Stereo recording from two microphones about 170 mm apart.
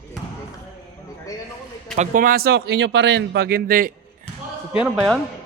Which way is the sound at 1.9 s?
50° right (ahead or behind).